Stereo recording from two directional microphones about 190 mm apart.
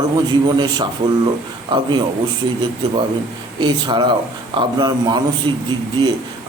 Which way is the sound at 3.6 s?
25° right (ahead or behind).